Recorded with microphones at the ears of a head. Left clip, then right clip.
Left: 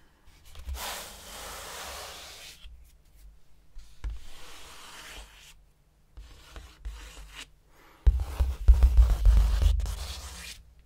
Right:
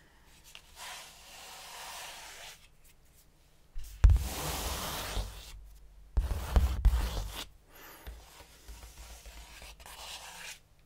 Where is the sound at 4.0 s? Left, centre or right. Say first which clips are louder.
Right 12 dB; right.